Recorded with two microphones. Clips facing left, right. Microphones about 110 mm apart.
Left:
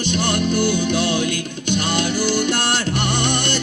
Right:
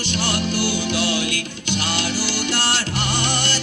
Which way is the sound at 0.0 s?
50° left (ahead or behind).